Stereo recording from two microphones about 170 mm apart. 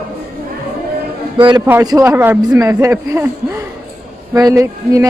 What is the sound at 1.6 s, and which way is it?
A man's voice, 15° right (ahead or behind).